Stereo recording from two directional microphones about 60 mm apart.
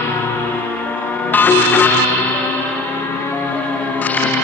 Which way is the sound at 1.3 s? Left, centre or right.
Left.